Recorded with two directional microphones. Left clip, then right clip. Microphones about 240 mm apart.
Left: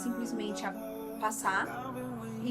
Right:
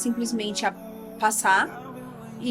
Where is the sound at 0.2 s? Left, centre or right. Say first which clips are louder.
Right 9 dB; right.